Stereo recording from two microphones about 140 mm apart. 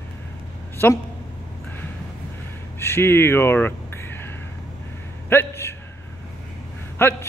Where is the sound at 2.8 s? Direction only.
20° left (ahead or behind).